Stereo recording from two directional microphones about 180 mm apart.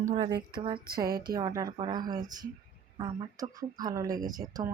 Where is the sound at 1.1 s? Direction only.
55° right (ahead or behind).